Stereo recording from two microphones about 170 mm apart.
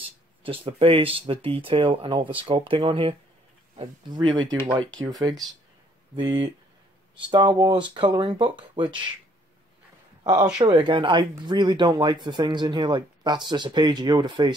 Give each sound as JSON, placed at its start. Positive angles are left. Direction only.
{"t": 0.4, "sound": "speech", "side_deg": -30}
{"t": 6.1, "sound": "speech", "side_deg": -30}
{"t": 10.2, "sound": "speech", "side_deg": -25}